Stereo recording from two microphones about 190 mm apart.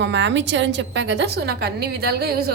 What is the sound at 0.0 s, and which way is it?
A woman's voice, 65° right (ahead or behind).